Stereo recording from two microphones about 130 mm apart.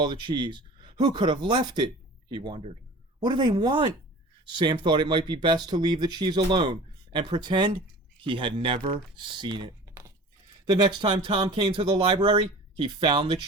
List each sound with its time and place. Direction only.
0.0 s speech: 35° right (ahead or behind)